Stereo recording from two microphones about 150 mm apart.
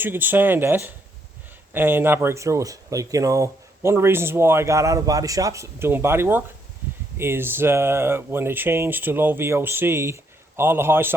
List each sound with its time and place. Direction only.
0.0 s speech: 15° right (ahead or behind)